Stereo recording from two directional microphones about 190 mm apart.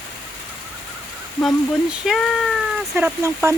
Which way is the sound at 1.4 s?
Centre (ahead or behind).